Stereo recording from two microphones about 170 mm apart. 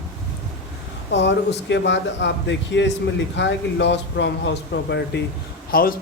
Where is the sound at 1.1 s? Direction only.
90° left.